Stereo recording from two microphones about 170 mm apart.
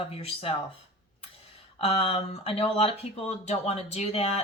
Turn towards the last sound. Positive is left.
turn(degrees=40)  # may be behind; listen again after turning